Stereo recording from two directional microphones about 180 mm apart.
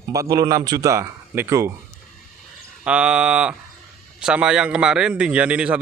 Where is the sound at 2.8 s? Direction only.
5° right (ahead or behind).